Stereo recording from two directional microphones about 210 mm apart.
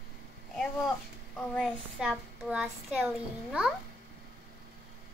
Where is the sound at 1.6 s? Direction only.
Centre (ahead or behind).